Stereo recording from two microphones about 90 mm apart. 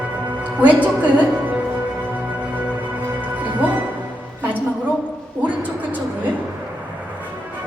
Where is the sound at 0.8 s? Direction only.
20° right (ahead or behind).